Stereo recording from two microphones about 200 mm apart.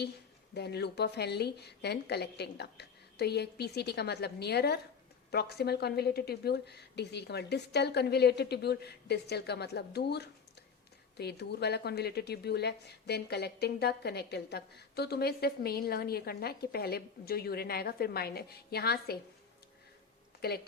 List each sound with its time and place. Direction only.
0.5 s a woman's voice: 55° left (ahead or behind)